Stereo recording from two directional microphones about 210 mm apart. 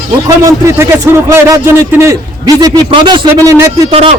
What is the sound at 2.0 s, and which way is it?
A man's voice, 15° right (ahead or behind).